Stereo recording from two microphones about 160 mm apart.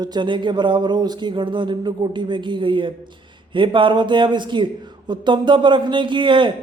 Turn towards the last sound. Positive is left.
turn(degrees=-30)  # may be behind; listen again after turning